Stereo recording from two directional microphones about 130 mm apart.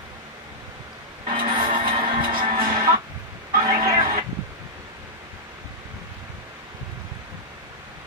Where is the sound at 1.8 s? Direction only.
40° right (ahead or behind).